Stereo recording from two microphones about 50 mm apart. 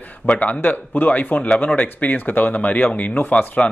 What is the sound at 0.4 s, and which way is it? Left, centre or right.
Speech, left.